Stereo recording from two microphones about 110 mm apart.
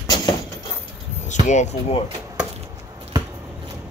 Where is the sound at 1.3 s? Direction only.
90° left.